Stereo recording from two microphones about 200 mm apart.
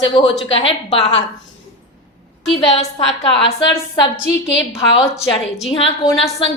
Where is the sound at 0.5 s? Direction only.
25° left (ahead or behind).